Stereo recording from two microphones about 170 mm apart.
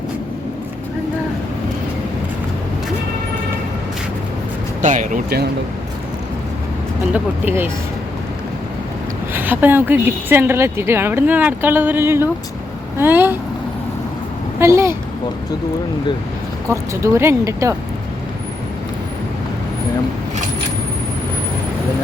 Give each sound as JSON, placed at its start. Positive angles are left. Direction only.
{"t": 4.8, "sound": "speech", "side_deg": -45}
{"t": 7.1, "sound": "a woman's voice", "side_deg": -10}
{"t": 9.3, "sound": "a woman's voice", "side_deg": -10}
{"t": 14.6, "sound": "a woman's voice", "side_deg": -15}
{"t": 16.6, "sound": "a woman's voice", "side_deg": -15}